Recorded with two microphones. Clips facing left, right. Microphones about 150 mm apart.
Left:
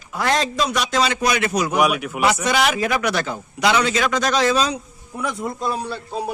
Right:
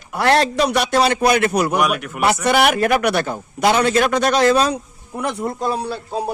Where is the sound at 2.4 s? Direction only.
60° right (ahead or behind).